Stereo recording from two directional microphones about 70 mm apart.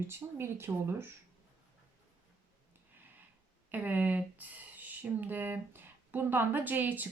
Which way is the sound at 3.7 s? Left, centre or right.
Right.